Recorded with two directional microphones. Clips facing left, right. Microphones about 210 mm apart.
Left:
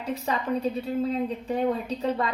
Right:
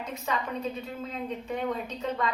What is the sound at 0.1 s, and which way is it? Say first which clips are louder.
Speech: left 7 dB; 35° left (ahead or behind).